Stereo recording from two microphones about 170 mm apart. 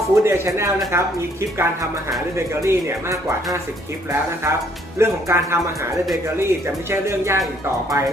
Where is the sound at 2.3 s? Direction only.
15° right (ahead or behind).